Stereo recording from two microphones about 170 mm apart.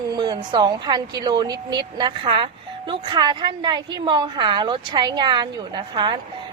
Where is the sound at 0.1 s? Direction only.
25° right (ahead or behind).